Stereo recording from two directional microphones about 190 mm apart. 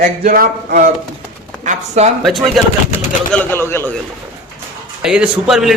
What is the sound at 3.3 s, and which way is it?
Speech, 10° left (ahead or behind).